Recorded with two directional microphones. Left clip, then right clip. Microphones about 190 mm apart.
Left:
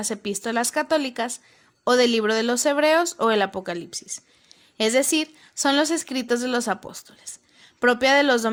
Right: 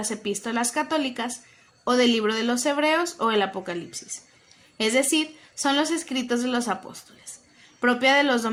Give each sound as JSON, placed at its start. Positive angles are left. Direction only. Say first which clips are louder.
{"t": 0.0, "sound": "speech", "louder": "left 1 dB", "side_deg": 45}